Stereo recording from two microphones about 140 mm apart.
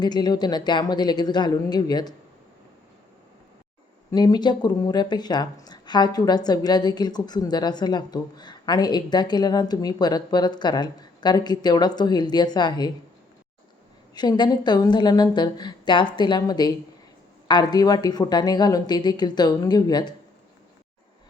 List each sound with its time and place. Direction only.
0.0 s speech: 30° left (ahead or behind)
4.1 s speech: 30° left (ahead or behind)
14.1 s speech: 30° left (ahead or behind)